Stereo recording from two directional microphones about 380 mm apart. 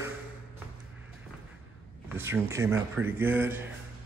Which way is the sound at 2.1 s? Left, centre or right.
Centre.